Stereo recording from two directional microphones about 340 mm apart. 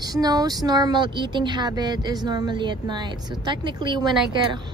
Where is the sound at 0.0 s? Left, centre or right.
Centre.